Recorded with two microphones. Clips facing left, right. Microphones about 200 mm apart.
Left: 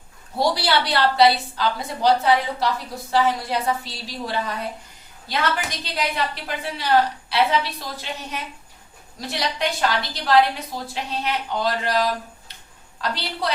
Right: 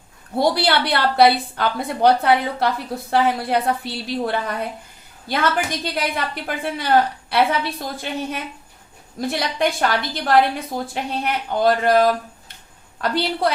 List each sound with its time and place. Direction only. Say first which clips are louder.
0.3 s a woman's voice: right 3 dB; 55° right (ahead or behind)